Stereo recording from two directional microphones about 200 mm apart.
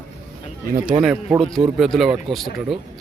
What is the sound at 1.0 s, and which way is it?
Speech, 5° right (ahead or behind).